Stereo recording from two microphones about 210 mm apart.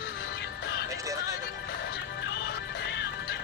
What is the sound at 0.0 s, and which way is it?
Music, 50° left (ahead or behind).